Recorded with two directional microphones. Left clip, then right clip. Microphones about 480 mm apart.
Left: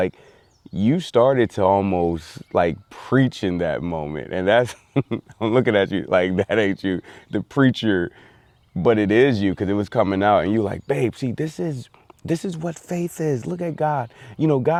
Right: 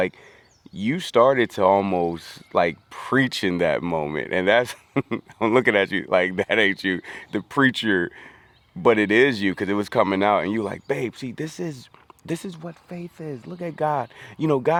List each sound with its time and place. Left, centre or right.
0.7 s speech: left
12.6 s speech: left
13.6 s speech: left